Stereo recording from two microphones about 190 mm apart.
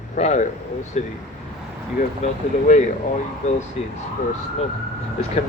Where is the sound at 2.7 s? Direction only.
40° left (ahead or behind).